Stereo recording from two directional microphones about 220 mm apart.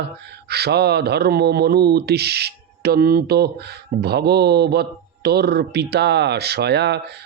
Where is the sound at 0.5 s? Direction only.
45° right (ahead or behind).